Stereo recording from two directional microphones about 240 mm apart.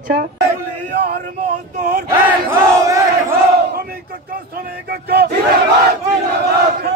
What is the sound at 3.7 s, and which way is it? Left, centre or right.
Battle cry, right.